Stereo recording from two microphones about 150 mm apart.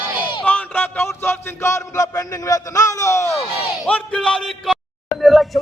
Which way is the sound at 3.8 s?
5° left (ahead or behind).